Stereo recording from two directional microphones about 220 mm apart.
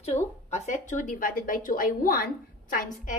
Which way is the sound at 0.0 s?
30° left (ahead or behind).